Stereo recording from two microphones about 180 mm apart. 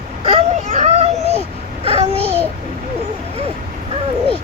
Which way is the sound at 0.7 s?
40° right (ahead or behind).